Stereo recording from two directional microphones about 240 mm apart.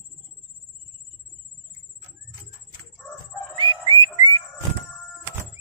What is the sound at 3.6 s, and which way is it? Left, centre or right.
Whistling, centre.